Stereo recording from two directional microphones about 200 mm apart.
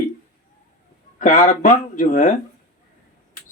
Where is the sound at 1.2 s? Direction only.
40° left (ahead or behind).